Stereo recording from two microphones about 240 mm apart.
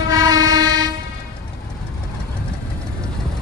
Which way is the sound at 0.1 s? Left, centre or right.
Centre.